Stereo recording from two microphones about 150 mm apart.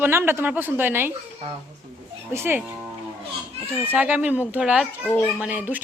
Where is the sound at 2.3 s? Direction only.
15° right (ahead or behind).